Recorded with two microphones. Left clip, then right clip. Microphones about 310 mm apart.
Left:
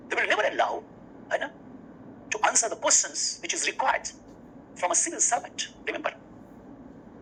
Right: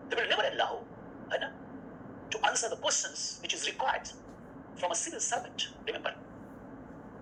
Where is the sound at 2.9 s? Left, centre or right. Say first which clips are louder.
Left 8 dB; centre.